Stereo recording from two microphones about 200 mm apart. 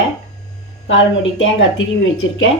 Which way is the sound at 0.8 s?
70° left (ahead or behind).